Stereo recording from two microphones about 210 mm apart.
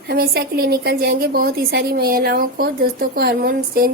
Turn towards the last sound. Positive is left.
turn(degrees=-45)  # may be behind; listen again after turning